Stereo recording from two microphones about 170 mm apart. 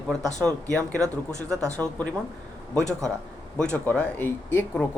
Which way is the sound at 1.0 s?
20° right (ahead or behind).